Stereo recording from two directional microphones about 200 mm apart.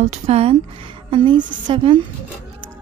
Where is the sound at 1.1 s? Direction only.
25° right (ahead or behind).